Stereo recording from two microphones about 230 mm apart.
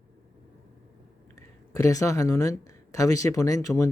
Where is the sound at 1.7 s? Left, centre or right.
Centre.